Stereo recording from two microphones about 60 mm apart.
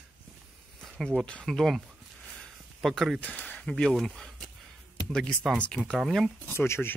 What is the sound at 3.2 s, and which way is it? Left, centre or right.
Speech, left.